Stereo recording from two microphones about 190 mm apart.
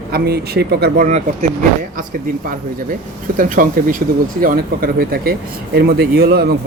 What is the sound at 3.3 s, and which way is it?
Speech, 45° right (ahead or behind).